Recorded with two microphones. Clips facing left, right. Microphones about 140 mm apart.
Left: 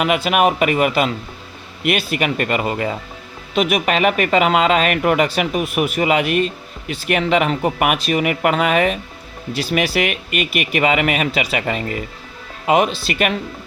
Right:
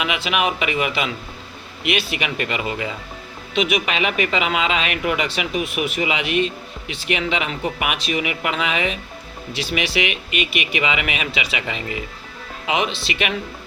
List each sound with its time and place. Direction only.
0.0 s speech: 45° left (ahead or behind)